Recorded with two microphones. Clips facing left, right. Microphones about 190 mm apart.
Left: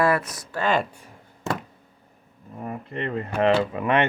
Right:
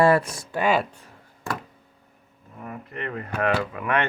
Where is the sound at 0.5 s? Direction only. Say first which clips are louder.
Right 1 dB; 10° right (ahead or behind).